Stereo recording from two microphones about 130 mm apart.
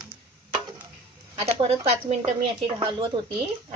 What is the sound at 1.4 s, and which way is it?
Speech, 55° right (ahead or behind).